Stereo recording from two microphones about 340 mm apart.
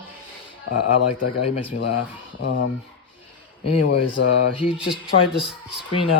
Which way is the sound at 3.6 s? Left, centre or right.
Left.